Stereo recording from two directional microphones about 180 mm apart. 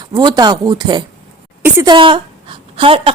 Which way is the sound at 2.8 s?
30° right (ahead or behind).